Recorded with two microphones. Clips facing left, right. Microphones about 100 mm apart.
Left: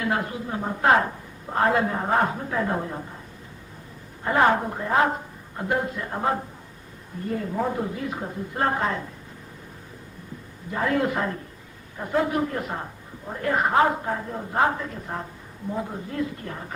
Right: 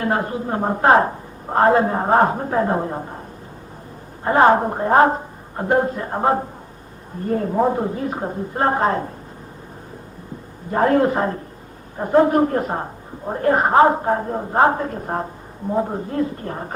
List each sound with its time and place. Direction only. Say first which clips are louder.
0.0 s a woman's voice: right 5 dB; 35° right (ahead or behind)
4.2 s a woman's voice: right 6 dB; 35° right (ahead or behind)
10.7 s a woman's voice: right 8 dB; 45° right (ahead or behind)